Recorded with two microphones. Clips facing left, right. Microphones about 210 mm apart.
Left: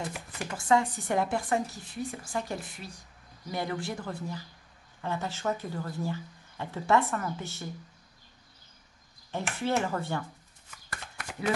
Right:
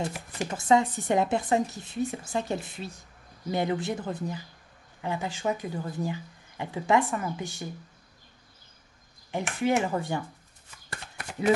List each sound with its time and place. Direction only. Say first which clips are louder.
0.0 s speech: right 5 dB; 20° right (ahead or behind)
9.3 s speech: right 4 dB; 15° right (ahead or behind)
10.9 s chopping: right 1 dB; 25° right (ahead or behind)